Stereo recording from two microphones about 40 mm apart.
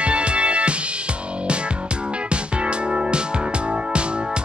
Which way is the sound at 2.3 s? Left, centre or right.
Right.